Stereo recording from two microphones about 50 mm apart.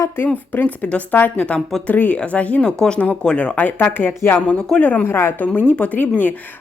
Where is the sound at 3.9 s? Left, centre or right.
Left.